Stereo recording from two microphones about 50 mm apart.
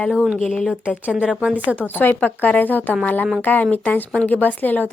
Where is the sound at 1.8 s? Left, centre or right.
Left.